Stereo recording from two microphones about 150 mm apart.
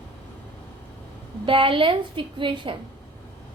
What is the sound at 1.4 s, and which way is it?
A woman's voice, 35° right (ahead or behind).